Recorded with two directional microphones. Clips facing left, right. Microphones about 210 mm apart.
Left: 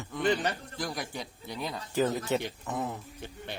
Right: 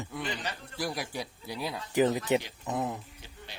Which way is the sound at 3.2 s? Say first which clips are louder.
Left 10 dB; 55° left (ahead or behind).